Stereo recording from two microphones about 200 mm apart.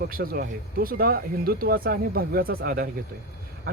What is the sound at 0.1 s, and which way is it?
Speech, 45° right (ahead or behind).